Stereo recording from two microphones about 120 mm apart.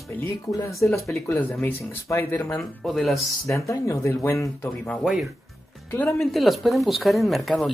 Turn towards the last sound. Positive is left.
turn(degrees=0)  # may be behind; listen again after turning